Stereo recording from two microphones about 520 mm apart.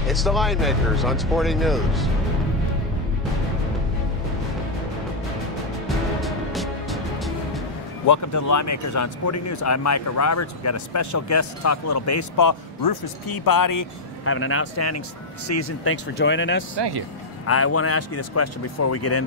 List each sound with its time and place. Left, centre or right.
0.0 s speech: centre
5.9 s music: centre
8.1 s speech: left
14.2 s speech: left
16.7 s speech: right
17.5 s speech: left